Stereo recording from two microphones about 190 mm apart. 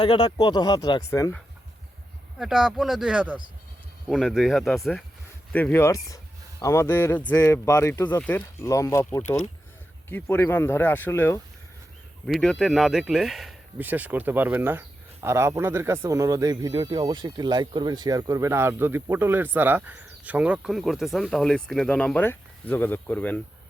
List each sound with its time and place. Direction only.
0.0 s speech: 25° left (ahead or behind)
2.4 s speech: centre (ahead or behind)
12.2 s speech: centre (ahead or behind)